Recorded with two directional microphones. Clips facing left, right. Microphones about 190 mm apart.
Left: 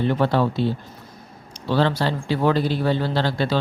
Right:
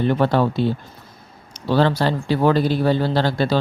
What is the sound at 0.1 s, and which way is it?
Speech, 50° right (ahead or behind).